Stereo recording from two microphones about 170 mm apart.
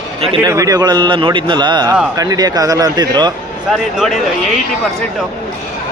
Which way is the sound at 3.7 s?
Centre (ahead or behind).